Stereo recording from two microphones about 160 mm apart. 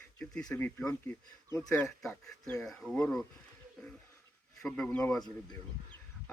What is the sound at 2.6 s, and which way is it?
Speech, centre (ahead or behind).